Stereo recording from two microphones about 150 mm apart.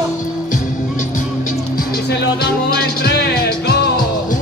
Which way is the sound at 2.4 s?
90° left.